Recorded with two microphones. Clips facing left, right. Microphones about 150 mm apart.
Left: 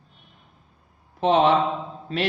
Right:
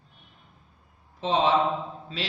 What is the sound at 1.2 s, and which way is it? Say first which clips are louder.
A man's voice: left 4 dB; 60° left (ahead or behind).